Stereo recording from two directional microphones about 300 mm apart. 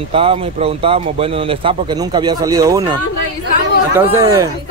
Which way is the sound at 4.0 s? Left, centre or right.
Centre.